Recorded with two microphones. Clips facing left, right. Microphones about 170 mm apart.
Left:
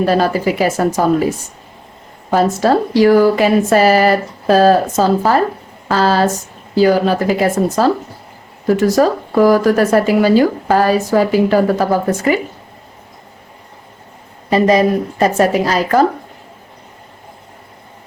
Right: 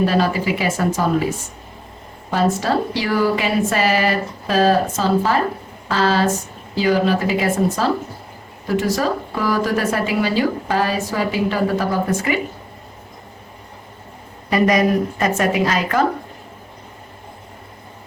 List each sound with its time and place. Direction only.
0.0 s a woman's voice: 45° left (ahead or behind)
2.3 s a woman's voice: 45° left (ahead or behind)
14.5 s a woman's voice: 30° left (ahead or behind)